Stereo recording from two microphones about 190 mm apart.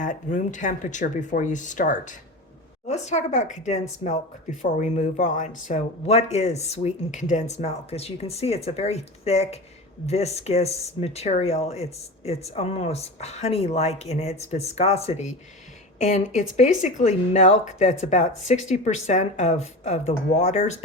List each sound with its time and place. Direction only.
0.0 s speech: 45° left (ahead or behind)